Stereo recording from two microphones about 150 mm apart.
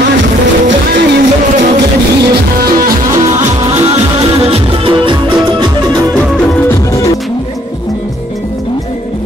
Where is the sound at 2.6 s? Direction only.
80° right.